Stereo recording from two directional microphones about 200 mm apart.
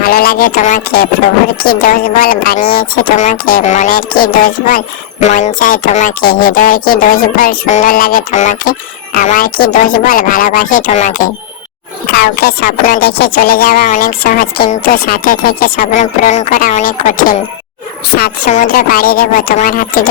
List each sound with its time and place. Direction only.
0.0 s speech: 45° left (ahead or behind)
12.1 s speech: 50° left (ahead or behind)